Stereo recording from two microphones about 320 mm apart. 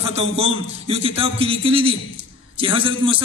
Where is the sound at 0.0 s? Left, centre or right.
Centre.